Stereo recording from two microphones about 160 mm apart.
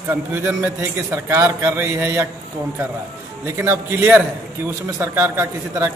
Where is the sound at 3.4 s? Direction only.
15° right (ahead or behind).